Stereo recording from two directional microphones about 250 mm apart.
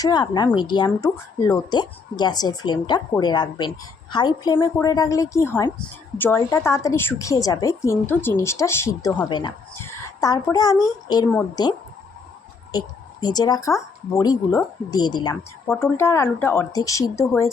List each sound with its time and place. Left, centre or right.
0.0 s a woman's voice: centre
13.2 s a woman's voice: centre